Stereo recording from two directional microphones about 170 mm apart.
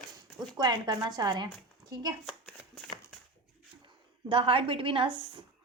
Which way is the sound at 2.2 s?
5° left (ahead or behind).